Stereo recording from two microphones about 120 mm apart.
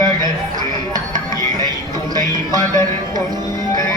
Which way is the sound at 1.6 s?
35° right (ahead or behind).